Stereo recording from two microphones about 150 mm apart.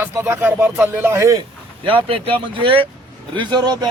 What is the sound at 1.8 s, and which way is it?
Speech, 35° right (ahead or behind).